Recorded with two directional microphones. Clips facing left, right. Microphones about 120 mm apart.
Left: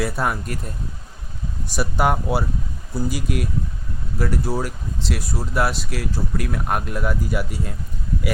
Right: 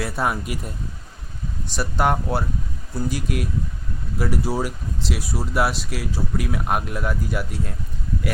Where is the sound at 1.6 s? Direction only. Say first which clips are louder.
Left 1 dB; 5° left (ahead or behind).